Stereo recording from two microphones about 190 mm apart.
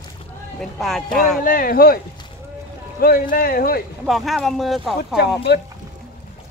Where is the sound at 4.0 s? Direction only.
Centre (ahead or behind).